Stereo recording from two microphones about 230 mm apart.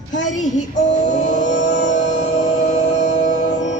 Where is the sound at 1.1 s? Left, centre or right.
Left.